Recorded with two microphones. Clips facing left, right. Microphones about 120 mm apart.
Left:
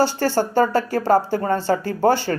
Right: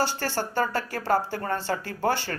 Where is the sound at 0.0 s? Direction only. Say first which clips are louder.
Left 8 dB; 35° left (ahead or behind).